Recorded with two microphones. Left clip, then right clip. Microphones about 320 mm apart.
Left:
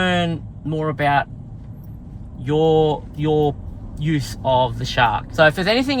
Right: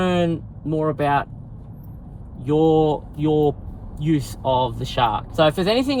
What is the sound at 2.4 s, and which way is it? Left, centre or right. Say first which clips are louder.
Speech: left 1 dB; left.